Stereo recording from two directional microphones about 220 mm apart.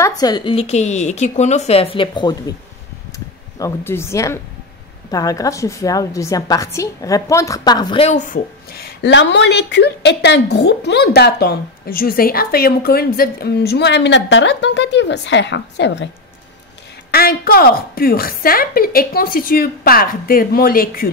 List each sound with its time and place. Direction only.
0.0 s a woman's voice: 20° left (ahead or behind)
3.5 s a woman's voice: 10° left (ahead or behind)
8.1 s a woman's voice: 35° left (ahead or behind); by 16.1 s 55° left (ahead or behind)
17.1 s a woman's voice: 45° left (ahead or behind)